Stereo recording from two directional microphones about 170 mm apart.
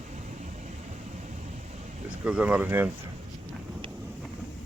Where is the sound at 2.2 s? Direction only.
10° right (ahead or behind).